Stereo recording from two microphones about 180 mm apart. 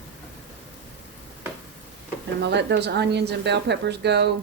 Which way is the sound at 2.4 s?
70° right (ahead or behind).